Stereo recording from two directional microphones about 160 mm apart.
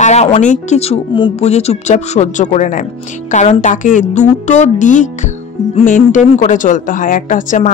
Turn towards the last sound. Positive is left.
turn(degrees=55)  # may be behind; listen again after turning